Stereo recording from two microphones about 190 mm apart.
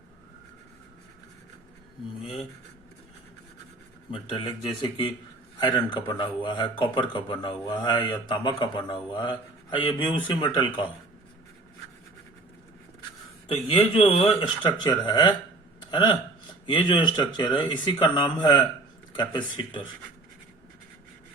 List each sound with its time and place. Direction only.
4.1 s a man's voice: 25° left (ahead or behind)
13.5 s a man's voice: 30° left (ahead or behind)
15.8 s a sound: 25° left (ahead or behind)
16.6 s a man's voice: 25° left (ahead or behind)